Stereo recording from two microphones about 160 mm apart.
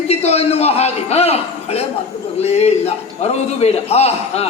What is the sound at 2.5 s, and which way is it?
A man's voice, 40° left (ahead or behind).